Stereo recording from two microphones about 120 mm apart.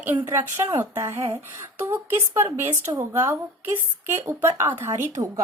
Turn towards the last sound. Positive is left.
turn(degrees=-25)  # may be behind; listen again after turning